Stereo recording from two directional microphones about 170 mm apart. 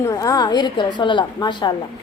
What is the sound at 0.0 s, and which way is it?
A woman's voice, 20° left (ahead or behind).